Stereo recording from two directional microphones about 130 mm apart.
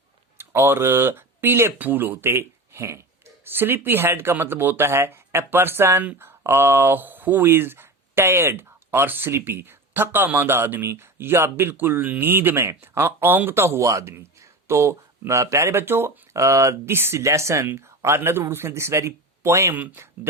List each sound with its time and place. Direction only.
0.3 s speech: 20° right (ahead or behind)